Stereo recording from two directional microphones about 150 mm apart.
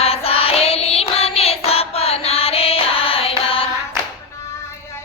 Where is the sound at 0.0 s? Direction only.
40° left (ahead or behind).